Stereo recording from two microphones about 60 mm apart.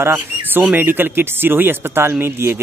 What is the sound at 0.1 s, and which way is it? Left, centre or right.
Speech, right.